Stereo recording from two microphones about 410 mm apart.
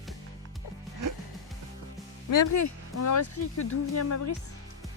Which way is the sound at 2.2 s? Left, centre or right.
Left.